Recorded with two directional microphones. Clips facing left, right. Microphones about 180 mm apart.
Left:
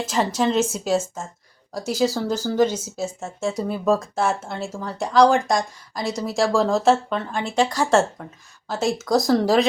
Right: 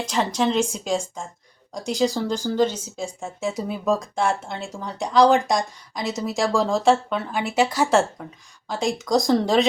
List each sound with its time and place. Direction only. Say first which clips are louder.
0.0 s speech: left 1 dB; 5° left (ahead or behind)